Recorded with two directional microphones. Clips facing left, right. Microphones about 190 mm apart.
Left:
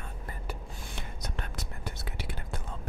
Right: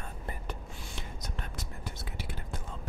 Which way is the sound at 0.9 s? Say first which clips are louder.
Left 3 dB; 65° left (ahead or behind).